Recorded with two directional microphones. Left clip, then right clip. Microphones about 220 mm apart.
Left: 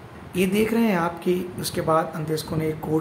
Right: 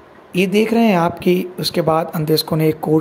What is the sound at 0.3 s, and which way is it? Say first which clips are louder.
Speech: right 6 dB; 20° right (ahead or behind).